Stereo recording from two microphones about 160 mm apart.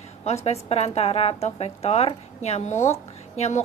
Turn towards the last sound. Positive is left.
turn(degrees=40)  # may be behind; listen again after turning